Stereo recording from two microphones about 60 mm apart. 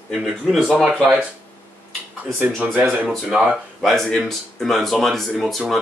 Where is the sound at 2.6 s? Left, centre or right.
Right.